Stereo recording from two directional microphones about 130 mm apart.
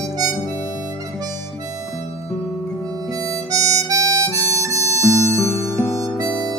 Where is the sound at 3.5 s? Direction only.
25° right (ahead or behind).